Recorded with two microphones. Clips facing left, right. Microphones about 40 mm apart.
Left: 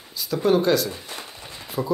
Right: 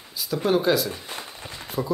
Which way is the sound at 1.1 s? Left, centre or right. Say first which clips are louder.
Right 1 dB; centre.